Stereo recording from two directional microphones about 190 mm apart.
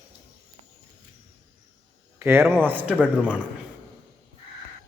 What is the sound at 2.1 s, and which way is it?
A man's voice, 10° right (ahead or behind).